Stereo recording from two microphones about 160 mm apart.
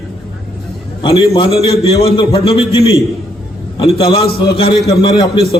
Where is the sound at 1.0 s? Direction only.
35° left (ahead or behind).